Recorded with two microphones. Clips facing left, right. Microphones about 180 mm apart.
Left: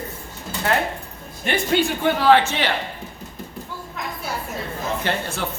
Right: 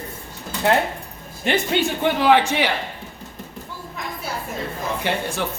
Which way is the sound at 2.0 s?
15° right (ahead or behind).